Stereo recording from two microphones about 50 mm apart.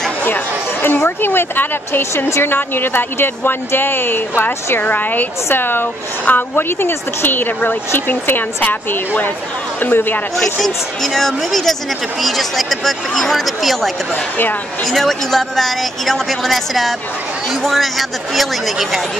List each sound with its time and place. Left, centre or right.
0.8 s speech: left
2.5 s a man's voice: left
10.3 s speech: centre